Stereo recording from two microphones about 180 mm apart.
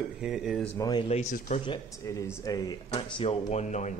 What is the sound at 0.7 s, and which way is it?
Speech, 25° left (ahead or behind).